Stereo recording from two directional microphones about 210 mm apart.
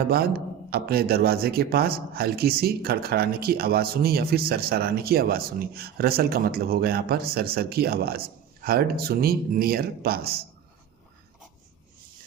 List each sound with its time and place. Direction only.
0.1 s a man's voice: 45° right (ahead or behind)